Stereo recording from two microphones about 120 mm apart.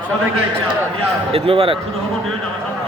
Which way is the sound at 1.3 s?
50° right (ahead or behind).